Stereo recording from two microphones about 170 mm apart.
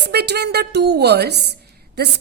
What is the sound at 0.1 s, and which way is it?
A woman's voice, 70° right (ahead or behind).